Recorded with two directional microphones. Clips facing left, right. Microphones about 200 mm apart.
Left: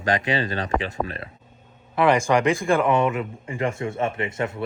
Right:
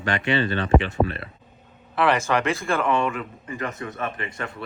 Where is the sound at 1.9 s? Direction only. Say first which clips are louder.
Left 3 dB; 10° left (ahead or behind).